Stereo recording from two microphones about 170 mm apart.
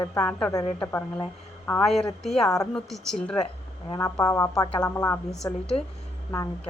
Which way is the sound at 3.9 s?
20° left (ahead or behind).